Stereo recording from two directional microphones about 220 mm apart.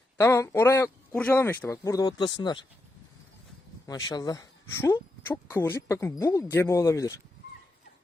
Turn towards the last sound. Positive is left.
turn(degrees=10)  # may be behind; listen again after turning